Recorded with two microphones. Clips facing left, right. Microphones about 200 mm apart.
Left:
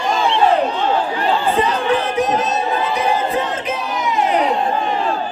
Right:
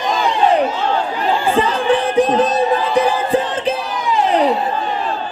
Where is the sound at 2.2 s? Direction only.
30° right (ahead or behind).